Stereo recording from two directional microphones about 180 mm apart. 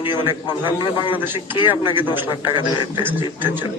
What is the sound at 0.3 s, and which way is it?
A man's voice, 30° left (ahead or behind).